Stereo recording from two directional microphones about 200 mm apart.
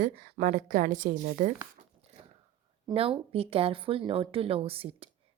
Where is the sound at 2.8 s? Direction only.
25° right (ahead or behind).